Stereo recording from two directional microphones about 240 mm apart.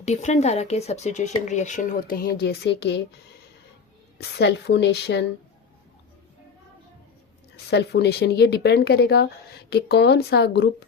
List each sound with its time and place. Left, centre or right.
0.0 s speech: left
4.2 s speech: left
7.5 s speech: left